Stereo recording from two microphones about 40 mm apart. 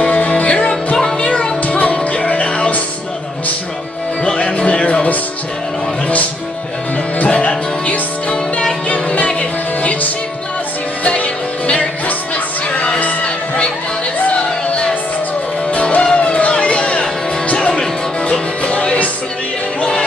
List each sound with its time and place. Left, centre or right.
0.0 s music: left
4.4 s music: left
7.2 s music: left
11.1 s music: left
17.6 s music: centre
18.2 s music: left